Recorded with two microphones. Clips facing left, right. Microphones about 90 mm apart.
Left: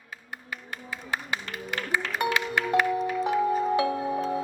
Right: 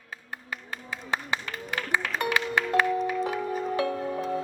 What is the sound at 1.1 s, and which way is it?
Applause, 25° right (ahead or behind).